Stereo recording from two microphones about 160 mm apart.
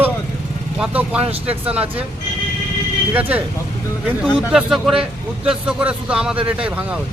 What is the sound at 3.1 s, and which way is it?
Speech, 10° right (ahead or behind).